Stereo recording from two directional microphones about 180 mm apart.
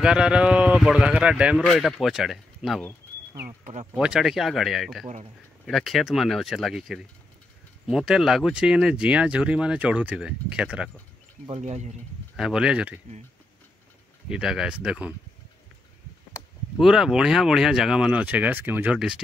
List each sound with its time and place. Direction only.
0.0 s speech: 5° right (ahead or behind)
3.9 s speech: 5° right (ahead or behind)
11.6 s speech: 40° right (ahead or behind)
12.4 s speech: 5° right (ahead or behind)
14.3 s speech: 5° right (ahead or behind)
16.7 s speech: centre (ahead or behind)